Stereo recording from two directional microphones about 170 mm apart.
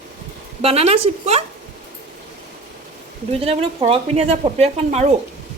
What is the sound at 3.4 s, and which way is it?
A woman's voice, 35° right (ahead or behind).